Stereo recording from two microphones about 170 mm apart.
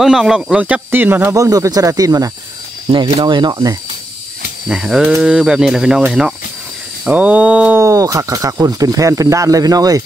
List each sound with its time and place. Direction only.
0.0 s speech: 5° right (ahead or behind); by 3.7 s 25° right (ahead or behind)
4.6 s speech: 5° right (ahead or behind); by 10.0 s 20° right (ahead or behind)